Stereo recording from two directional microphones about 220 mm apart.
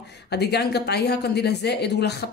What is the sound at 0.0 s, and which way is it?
Speech, 50° left (ahead or behind).